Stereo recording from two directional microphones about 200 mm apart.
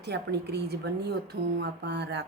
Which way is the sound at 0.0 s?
55° right (ahead or behind).